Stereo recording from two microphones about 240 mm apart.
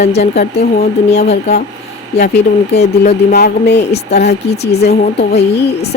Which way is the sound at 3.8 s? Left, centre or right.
Left.